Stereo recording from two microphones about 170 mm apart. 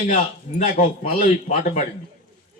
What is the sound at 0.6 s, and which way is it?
Speech, 55° left (ahead or behind).